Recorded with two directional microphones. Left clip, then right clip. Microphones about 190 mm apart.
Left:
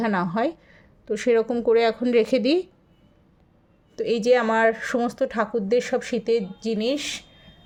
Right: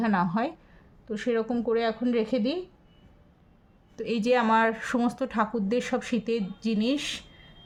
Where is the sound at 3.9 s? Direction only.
20° left (ahead or behind).